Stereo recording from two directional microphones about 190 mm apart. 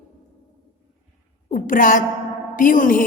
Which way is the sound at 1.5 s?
45° left (ahead or behind).